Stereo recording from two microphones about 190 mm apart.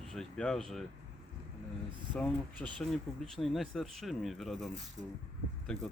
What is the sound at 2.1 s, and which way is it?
Speech, 5° left (ahead or behind).